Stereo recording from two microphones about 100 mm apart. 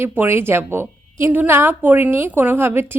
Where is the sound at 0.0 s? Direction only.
20° right (ahead or behind).